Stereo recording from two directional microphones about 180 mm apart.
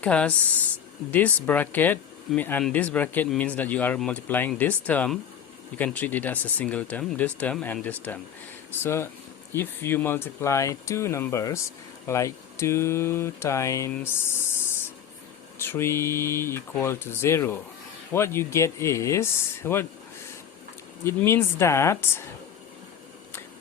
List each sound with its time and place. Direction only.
0.0 s speech: 5° left (ahead or behind)
15.5 s speech: 15° left (ahead or behind)
21.0 s speech: 15° left (ahead or behind)